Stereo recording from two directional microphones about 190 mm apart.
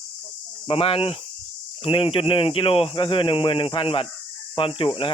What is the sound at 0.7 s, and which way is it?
Speech, 30° left (ahead or behind).